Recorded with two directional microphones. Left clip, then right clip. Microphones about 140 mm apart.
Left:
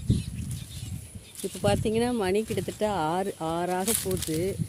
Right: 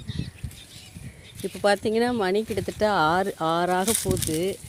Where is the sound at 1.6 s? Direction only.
10° right (ahead or behind).